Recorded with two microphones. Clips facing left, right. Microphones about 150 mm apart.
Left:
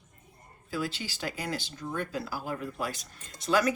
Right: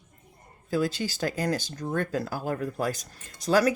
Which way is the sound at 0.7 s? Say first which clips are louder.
Right 7 dB; 40° right (ahead or behind).